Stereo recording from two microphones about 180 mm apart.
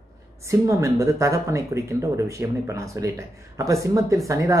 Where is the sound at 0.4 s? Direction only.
15° right (ahead or behind).